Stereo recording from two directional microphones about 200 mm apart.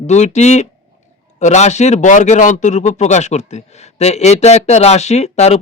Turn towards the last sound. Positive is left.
turn(degrees=35)  # may be behind; listen again after turning